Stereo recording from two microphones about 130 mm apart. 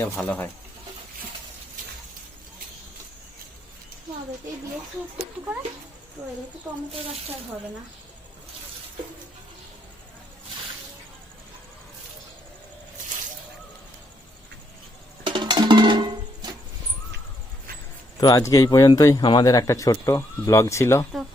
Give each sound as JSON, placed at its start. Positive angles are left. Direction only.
{"t": 0.2, "sound": "speech", "side_deg": 10}
{"t": 6.2, "sound": "a woman's voice", "side_deg": -10}
{"t": 15.2, "sound": "music", "side_deg": -35}
{"t": 18.2, "sound": "speech", "side_deg": 30}